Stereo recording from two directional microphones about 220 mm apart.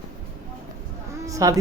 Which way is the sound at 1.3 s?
15° right (ahead or behind).